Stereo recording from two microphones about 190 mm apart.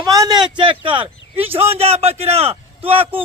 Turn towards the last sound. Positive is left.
turn(degrees=-30)  # may be behind; listen again after turning